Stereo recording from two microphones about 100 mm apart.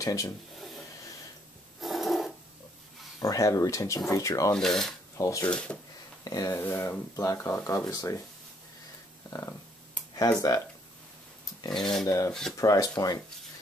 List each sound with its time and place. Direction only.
0.0 s speech: 35° left (ahead or behind)
1.8 s filing: centre (ahead or behind)
3.2 s speech: 35° left (ahead or behind)
4.6 s speech: 5° left (ahead or behind)
5.1 s speech: 35° left (ahead or behind)
5.5 s speech: 10° left (ahead or behind)
6.2 s speech: 35° left (ahead or behind)
6.6 s speech: 25° left (ahead or behind)
9.3 s speech: 30° left (ahead or behind)
11.7 s speech: 5° left (ahead or behind)
12.5 s speech: 35° left (ahead or behind)